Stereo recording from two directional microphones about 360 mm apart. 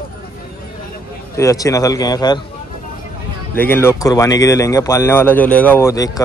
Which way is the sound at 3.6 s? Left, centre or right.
Centre.